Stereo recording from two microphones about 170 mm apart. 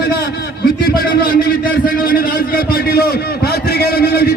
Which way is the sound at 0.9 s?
60° left (ahead or behind).